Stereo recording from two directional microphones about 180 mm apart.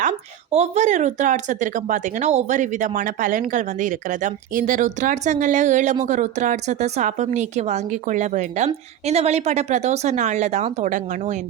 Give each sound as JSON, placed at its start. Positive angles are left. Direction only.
{"t": 0.5, "sound": "speech", "side_deg": -40}